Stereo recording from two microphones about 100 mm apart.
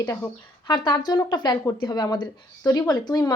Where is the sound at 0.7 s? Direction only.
50° left (ahead or behind).